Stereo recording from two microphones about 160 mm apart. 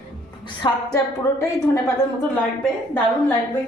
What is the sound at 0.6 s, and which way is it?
A woman's voice, 25° left (ahead or behind).